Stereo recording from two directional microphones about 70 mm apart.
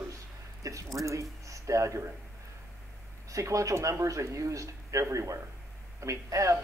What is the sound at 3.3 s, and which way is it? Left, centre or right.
Speech, right.